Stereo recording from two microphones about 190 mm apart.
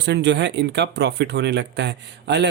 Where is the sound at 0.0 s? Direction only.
65° right (ahead or behind).